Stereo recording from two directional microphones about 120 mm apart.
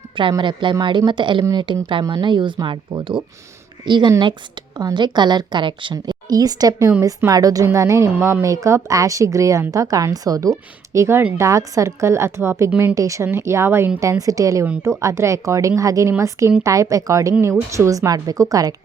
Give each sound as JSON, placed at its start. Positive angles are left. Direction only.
{"t": 0.2, "sound": "a woman's voice", "side_deg": -40}